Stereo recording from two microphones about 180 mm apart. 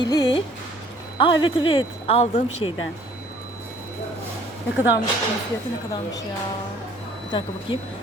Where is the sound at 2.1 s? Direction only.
35° left (ahead or behind).